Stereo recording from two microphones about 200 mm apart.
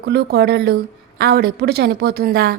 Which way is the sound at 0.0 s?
55° right (ahead or behind).